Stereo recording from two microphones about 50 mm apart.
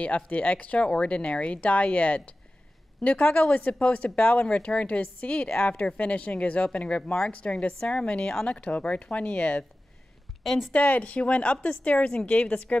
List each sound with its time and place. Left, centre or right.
0.0 s speech: left
10.4 s speech: centre
10.7 s speech: left